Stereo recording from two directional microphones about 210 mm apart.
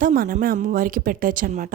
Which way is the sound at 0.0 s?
40° right (ahead or behind).